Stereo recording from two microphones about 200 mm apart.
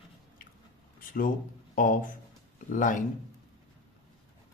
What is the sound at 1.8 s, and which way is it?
Speech, 40° left (ahead or behind).